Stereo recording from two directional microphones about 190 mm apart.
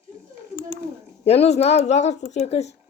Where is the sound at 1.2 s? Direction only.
35° left (ahead or behind).